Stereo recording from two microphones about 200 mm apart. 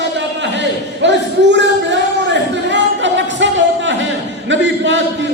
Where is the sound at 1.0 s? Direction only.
60° right (ahead or behind).